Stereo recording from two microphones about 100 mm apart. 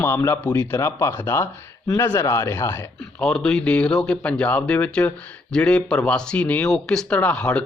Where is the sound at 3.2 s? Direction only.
5° left (ahead or behind).